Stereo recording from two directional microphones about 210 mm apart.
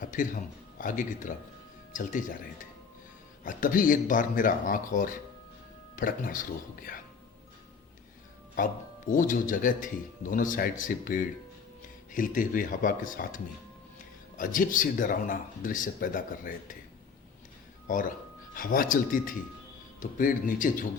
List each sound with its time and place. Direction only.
0.0 s a sound: 40° left (ahead or behind)
0.8 s speech: 40° left (ahead or behind)
3.4 s speech: 40° left (ahead or behind)
8.5 s speech: 40° left (ahead or behind)
18.5 s speech: 40° left (ahead or behind)